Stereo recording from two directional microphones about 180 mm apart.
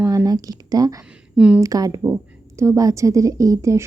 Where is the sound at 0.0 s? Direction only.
15° right (ahead or behind).